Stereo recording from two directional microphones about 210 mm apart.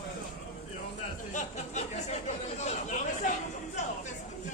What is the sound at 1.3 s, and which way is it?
Chatter, 30° left (ahead or behind).